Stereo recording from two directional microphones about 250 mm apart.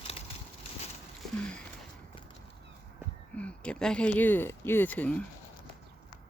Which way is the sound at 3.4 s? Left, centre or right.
Centre.